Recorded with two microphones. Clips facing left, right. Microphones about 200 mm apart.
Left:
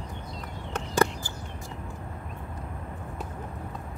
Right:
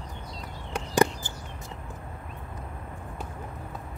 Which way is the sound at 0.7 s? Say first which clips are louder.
Right 2 dB; 15° right (ahead or behind).